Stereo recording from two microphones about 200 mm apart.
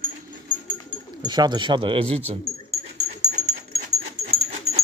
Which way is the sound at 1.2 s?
20° right (ahead or behind).